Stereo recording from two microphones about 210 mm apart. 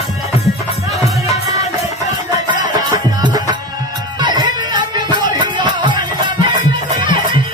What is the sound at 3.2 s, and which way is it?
Music, 20° right (ahead or behind).